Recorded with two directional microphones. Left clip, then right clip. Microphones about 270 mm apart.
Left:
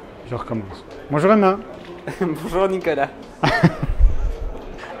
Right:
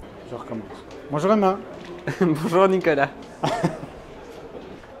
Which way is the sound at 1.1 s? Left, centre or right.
Left.